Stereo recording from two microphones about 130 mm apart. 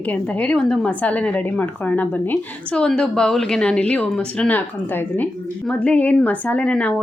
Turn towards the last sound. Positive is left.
turn(degrees=10)  # may be behind; listen again after turning